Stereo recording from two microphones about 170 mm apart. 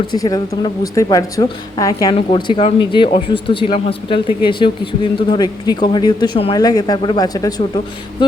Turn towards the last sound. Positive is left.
turn(degrees=20)  # may be behind; listen again after turning